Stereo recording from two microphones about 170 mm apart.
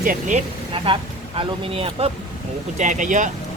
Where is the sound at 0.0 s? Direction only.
50° right (ahead or behind).